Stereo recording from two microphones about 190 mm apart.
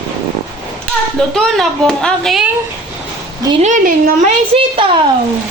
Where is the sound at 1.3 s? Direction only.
Centre (ahead or behind).